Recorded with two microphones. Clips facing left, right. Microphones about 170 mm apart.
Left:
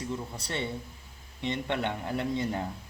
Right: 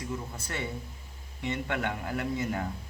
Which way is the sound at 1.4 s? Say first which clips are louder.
Left 1 dB; 25° left (ahead or behind).